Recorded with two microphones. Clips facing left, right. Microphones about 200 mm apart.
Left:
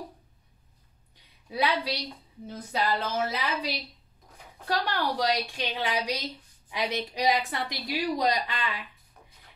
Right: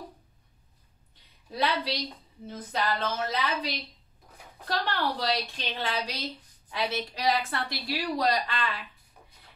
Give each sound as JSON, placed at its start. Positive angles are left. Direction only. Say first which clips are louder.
{"t": 1.5, "sound": "a woman's voice", "louder": "left 1 dB", "side_deg": 10}